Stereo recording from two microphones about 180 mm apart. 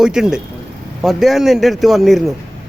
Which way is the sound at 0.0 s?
5° right (ahead or behind).